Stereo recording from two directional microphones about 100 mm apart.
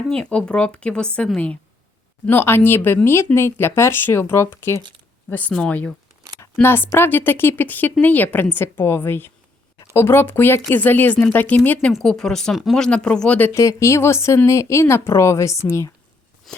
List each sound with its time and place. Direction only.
0.1 s speech: 10° left (ahead or behind)
2.2 s speech: 20° left (ahead or behind)
5.3 s speech: 15° left (ahead or behind)
6.4 s speech: 25° left (ahead or behind)
11.9 s speech: 5° left (ahead or behind)
13.5 s speech: 30° left (ahead or behind)
16.5 s a sound: 5° left (ahead or behind)